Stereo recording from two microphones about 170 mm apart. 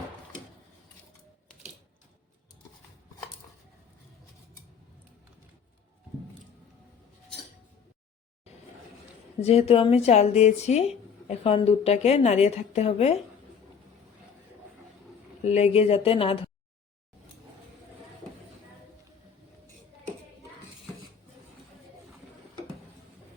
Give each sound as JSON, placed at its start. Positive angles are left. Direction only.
{"t": 9.4, "sound": "speech", "side_deg": 35}
{"t": 15.4, "sound": "speech", "side_deg": 40}